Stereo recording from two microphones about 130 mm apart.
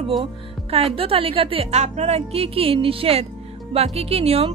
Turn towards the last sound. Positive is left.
turn(degrees=-50)  # may be behind; listen again after turning